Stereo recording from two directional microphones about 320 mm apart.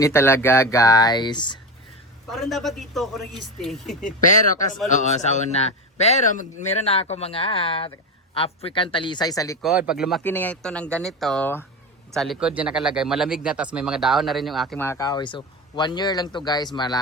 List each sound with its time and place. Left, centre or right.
0.0 s speech: centre
2.3 s speech: centre
4.9 s a man's voice: left
9.6 s speech: centre